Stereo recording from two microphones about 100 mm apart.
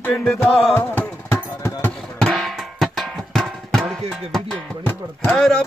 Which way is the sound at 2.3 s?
Centre (ahead or behind).